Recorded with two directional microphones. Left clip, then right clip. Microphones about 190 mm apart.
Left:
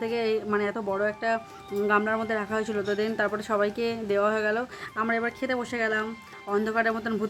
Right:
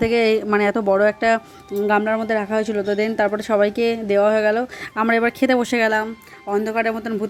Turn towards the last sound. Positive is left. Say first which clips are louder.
# right 5 dB
turn(degrees=-15)  # may be behind; listen again after turning